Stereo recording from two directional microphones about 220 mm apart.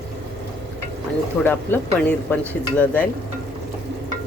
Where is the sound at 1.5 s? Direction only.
10° left (ahead or behind).